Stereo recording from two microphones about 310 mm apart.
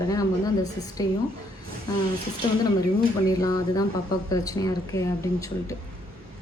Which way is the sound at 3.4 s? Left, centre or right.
Centre.